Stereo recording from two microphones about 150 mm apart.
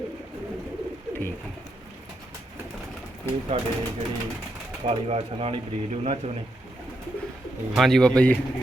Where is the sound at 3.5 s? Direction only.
40° right (ahead or behind).